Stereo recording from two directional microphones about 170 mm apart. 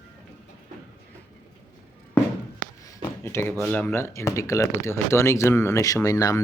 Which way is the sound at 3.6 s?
10° left (ahead or behind).